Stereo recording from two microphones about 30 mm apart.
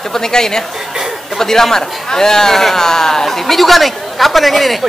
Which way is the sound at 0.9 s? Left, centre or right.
Centre.